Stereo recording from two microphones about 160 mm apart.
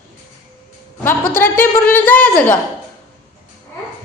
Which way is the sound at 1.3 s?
15° left (ahead or behind).